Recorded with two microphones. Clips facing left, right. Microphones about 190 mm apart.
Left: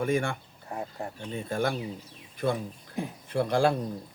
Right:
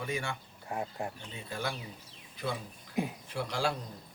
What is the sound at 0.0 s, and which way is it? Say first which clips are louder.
Speech: left 9 dB; 50° left (ahead or behind).